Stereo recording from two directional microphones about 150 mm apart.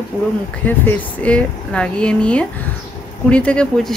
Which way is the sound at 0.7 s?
10° left (ahead or behind).